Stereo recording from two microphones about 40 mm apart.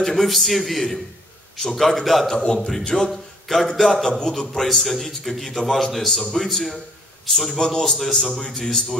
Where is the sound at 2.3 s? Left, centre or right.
Left.